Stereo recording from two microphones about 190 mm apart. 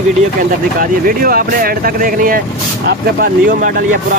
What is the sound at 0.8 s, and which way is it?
Speech, 50° right (ahead or behind).